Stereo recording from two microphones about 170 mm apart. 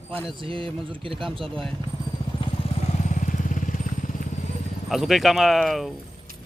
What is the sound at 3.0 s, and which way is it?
Vehicle, 45° left (ahead or behind).